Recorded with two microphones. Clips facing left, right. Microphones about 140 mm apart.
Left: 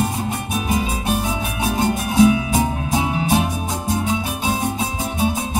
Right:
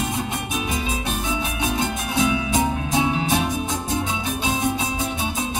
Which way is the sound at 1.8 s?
45° left (ahead or behind).